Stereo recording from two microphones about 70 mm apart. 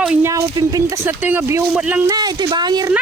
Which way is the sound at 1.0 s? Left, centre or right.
Right.